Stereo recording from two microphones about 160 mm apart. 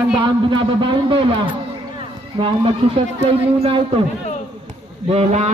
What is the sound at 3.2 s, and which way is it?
Speech, 40° right (ahead or behind).